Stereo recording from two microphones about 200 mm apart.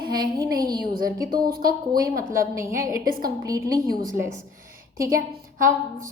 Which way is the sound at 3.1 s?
45° right (ahead or behind).